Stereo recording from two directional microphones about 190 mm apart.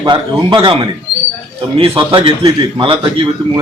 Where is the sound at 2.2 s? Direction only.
25° right (ahead or behind).